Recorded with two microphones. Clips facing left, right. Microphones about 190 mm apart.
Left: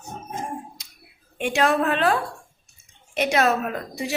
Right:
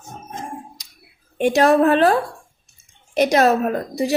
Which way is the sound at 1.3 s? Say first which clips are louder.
Right 7 dB; 40° right (ahead or behind).